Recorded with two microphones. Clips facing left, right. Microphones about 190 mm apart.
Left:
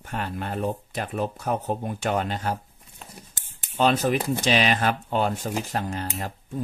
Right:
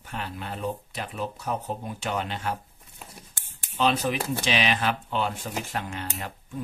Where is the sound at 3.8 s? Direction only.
45° left (ahead or behind).